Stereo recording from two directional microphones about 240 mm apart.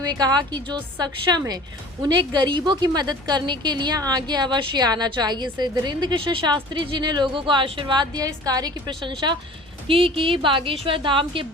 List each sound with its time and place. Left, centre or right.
0.0 s a woman's voice: centre